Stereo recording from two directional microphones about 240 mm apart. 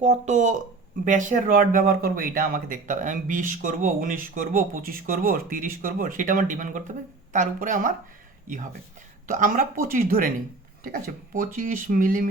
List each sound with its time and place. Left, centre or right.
0.0 s speech: right
11.3 s speech: right